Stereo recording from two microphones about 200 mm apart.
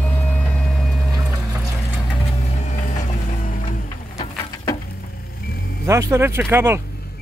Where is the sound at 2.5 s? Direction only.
35° left (ahead or behind).